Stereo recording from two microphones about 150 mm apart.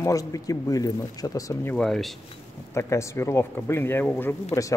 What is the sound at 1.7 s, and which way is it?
Speech, centre (ahead or behind).